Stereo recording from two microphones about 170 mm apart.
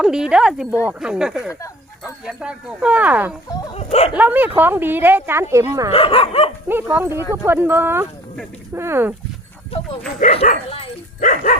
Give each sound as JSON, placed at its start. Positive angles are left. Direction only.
{"t": 0.0, "sound": "speech", "side_deg": -5}
{"t": 5.9, "sound": "speech", "side_deg": 35}
{"t": 6.7, "sound": "speech", "side_deg": -10}
{"t": 10.2, "sound": "speech", "side_deg": 45}